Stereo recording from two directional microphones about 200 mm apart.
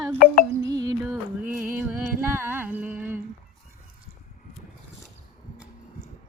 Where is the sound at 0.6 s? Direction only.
20° right (ahead or behind).